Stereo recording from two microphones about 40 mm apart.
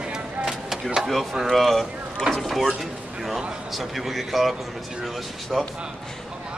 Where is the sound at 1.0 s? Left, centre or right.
Centre.